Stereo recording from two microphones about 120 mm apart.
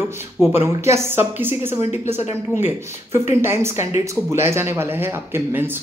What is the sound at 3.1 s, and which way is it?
Speech, 20° right (ahead or behind).